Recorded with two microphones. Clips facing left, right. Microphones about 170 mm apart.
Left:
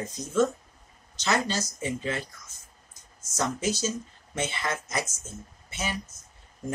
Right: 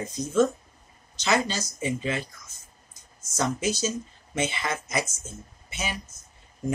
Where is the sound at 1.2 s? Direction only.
15° right (ahead or behind).